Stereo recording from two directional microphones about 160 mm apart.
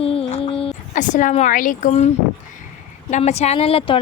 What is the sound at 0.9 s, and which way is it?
Speech, 50° left (ahead or behind).